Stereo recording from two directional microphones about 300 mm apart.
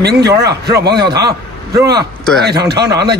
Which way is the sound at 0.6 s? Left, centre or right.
Right.